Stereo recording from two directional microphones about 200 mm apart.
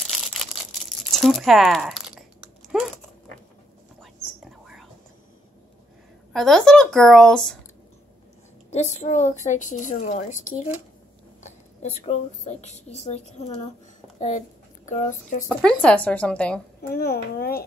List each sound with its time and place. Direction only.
0.0 s crumpling: centre (ahead or behind)
4.0 s whispering: centre (ahead or behind)
6.3 s speech: centre (ahead or behind)
8.6 s a woman's voice: 35° left (ahead or behind)
11.4 s a woman's voice: 35° left (ahead or behind)
14.9 s a woman's voice: 40° left (ahead or behind)
15.4 s speech: 5° left (ahead or behind)
16.9 s a child's voice: 50° left (ahead or behind)